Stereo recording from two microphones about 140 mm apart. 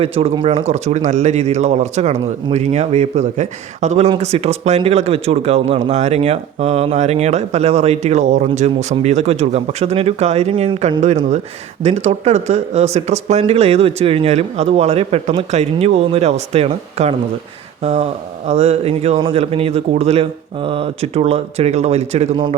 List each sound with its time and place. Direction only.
0.0 s speech: 45° right (ahead or behind)
0.7 s speech: 55° right (ahead or behind)
11.8 s speech: 50° right (ahead or behind)